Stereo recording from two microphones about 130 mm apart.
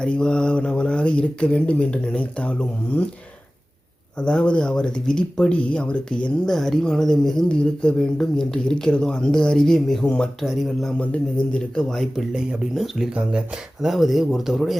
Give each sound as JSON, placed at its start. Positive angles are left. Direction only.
{"t": 0.0, "sound": "speech", "side_deg": 5}
{"t": 4.2, "sound": "speech", "side_deg": 10}